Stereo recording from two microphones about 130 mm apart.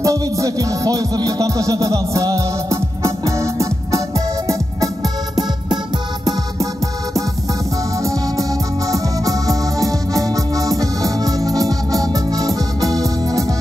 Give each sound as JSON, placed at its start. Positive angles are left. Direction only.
{"t": 0.0, "sound": "music", "side_deg": -25}
{"t": 8.0, "sound": "music", "side_deg": -25}